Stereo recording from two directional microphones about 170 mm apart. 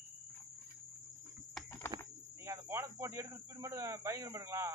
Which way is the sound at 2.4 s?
15° right (ahead or behind).